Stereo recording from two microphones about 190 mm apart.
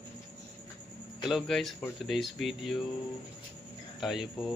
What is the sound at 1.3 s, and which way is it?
Speech, centre (ahead or behind).